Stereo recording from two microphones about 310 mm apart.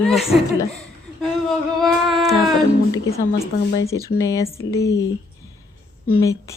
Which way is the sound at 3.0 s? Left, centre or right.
Centre.